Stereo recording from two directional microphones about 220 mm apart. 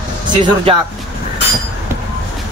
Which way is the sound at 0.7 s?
25° right (ahead or behind).